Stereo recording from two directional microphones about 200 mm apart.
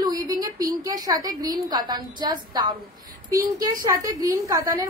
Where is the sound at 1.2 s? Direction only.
20° right (ahead or behind).